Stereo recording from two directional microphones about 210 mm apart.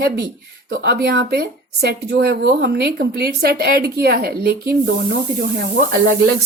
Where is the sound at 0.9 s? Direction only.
50° right (ahead or behind).